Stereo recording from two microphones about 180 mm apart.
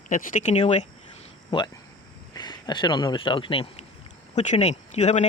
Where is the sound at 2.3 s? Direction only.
25° left (ahead or behind).